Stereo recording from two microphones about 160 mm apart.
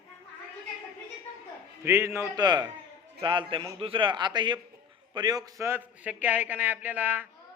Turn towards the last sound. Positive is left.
turn(degrees=-10)  # may be behind; listen again after turning